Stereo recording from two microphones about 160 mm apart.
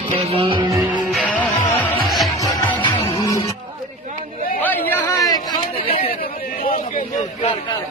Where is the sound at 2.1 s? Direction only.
Centre (ahead or behind).